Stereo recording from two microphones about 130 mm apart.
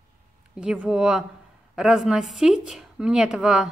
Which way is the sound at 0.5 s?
5° right (ahead or behind).